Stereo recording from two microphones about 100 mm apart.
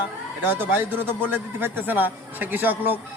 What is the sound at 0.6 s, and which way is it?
A man's voice, 20° right (ahead or behind).